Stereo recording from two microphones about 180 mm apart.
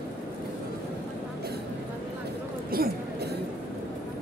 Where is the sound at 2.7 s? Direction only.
55° right (ahead or behind).